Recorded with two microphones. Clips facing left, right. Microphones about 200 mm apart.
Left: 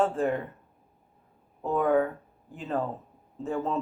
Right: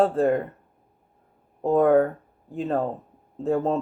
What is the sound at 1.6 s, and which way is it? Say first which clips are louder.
Speech: right 7 dB; 40° right (ahead or behind).